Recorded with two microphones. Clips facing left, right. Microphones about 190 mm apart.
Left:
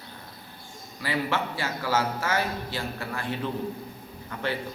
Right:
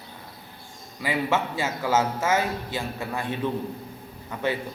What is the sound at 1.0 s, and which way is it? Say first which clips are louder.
A man's voice: right 3 dB; 15° right (ahead or behind).